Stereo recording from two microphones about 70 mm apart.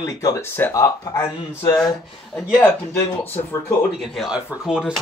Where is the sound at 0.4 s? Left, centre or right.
Left.